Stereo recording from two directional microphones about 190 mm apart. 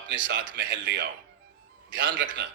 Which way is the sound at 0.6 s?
75° right (ahead or behind).